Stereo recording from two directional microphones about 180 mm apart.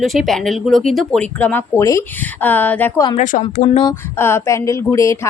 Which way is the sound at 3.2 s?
40° left (ahead or behind).